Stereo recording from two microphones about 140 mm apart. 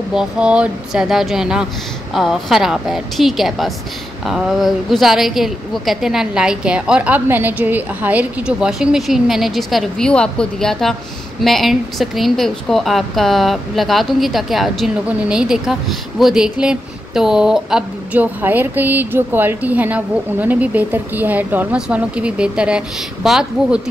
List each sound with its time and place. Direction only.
0.1 s a woman's voice: 5° right (ahead or behind)